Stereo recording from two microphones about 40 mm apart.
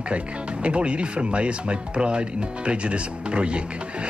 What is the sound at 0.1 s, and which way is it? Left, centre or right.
Speech, right.